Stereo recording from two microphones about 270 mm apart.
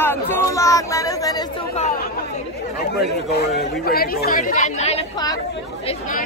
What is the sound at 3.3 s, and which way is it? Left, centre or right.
Speech, left.